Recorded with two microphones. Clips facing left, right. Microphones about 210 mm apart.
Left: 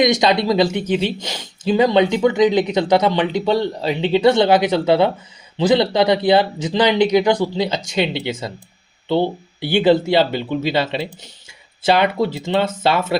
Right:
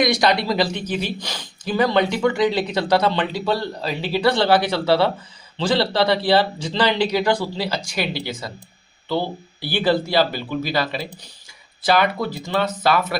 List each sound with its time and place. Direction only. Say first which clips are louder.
0.0 s speech: left 3 dB; 20° left (ahead or behind)